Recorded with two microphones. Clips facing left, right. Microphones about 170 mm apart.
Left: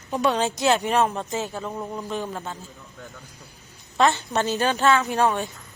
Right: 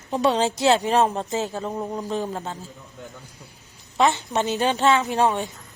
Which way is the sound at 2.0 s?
35° right (ahead or behind).